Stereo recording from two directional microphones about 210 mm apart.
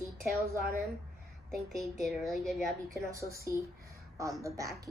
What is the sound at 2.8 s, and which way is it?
A child's voice, 15° right (ahead or behind).